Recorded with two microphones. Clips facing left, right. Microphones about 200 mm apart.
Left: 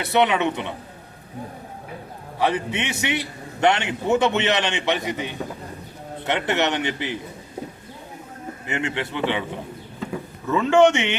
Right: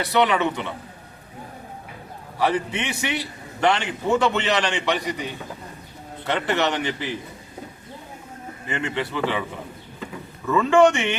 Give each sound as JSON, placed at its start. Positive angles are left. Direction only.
{"t": 0.1, "sound": "a man's voice", "side_deg": 20}
{"t": 2.5, "sound": "a man's voice", "side_deg": 20}
{"t": 8.6, "sound": "a man's voice", "side_deg": 20}
{"t": 10.5, "sound": "a man's voice", "side_deg": 20}